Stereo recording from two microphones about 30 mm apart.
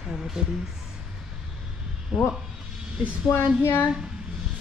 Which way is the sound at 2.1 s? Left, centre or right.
Right.